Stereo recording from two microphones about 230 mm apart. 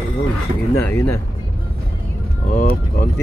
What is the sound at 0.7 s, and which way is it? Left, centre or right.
Speech, centre.